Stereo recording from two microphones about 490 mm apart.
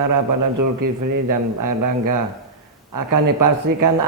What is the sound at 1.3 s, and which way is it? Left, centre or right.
Speech, right.